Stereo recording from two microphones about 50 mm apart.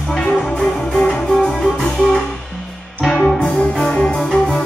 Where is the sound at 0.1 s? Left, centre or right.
Centre.